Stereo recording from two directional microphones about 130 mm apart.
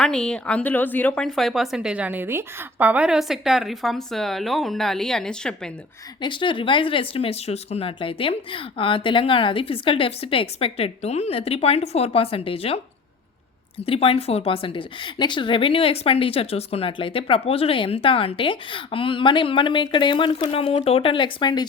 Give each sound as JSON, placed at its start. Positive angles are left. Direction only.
{"t": 0.0, "sound": "speech", "side_deg": 5}
{"t": 6.2, "sound": "a woman's voice", "side_deg": 40}
{"t": 13.8, "sound": "a woman's voice", "side_deg": 50}